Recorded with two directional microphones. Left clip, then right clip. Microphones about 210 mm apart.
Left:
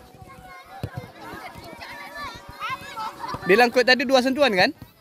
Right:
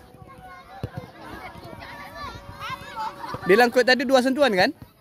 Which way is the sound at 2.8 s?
55° left (ahead or behind).